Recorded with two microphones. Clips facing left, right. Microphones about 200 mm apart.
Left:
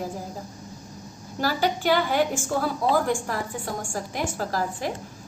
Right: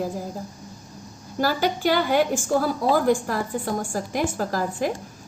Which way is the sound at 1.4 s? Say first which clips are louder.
Right 1 dB; 40° right (ahead or behind).